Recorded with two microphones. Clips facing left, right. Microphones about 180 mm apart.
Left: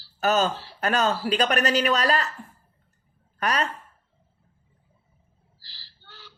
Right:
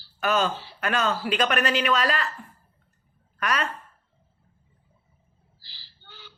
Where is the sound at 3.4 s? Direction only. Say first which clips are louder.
Left 2 dB; 35° left (ahead or behind).